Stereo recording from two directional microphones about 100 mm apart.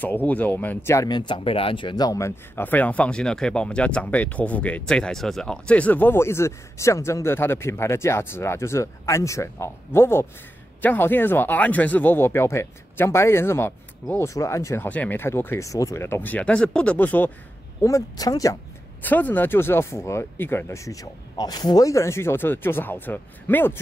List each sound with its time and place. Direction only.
0.0 s speech: 15° left (ahead or behind)
1.0 s speech: 50° left (ahead or behind)
2.0 s speech: 30° left (ahead or behind)
2.6 s speech: 15° left (ahead or behind)
14.3 s speech: 30° left (ahead or behind)
14.9 s speech: 15° left (ahead or behind)
15.6 s speech: 35° left (ahead or behind); by 17.3 s 15° left (ahead or behind)
17.8 s speech: 35° left (ahead or behind)
19.0 s speech: 20° left (ahead or behind)